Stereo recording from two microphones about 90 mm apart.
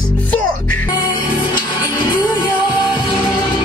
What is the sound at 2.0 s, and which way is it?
Music, 60° left (ahead or behind).